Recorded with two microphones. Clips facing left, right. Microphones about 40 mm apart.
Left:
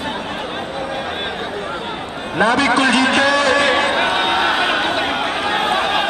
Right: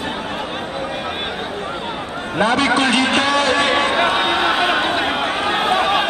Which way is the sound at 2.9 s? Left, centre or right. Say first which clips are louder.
Left 2 dB; right.